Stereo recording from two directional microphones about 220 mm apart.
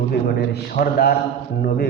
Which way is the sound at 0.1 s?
45° left (ahead or behind).